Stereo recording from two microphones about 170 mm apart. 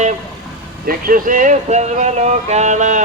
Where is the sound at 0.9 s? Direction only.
55° right (ahead or behind).